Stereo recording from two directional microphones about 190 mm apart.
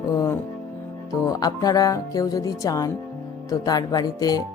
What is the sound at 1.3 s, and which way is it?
Speech, 20° left (ahead or behind).